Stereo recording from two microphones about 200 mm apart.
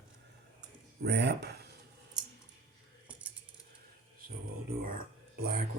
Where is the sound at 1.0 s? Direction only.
55° right (ahead or behind).